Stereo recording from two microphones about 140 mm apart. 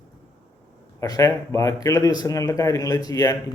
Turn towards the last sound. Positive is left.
turn(degrees=25)  # may be behind; listen again after turning